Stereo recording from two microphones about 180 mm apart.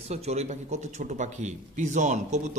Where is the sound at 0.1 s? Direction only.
35° right (ahead or behind).